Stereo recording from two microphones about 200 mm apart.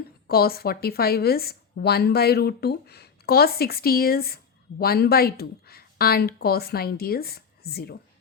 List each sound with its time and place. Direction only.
0.3 s speech: 50° left (ahead or behind)